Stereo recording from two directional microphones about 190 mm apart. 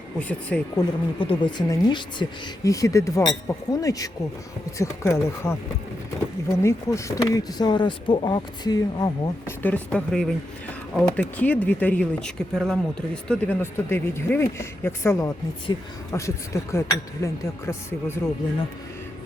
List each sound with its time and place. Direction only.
0.2 s speech: 5° left (ahead or behind)
0.8 s speech: 25° left (ahead or behind)
9.6 s speech: 5° left (ahead or behind)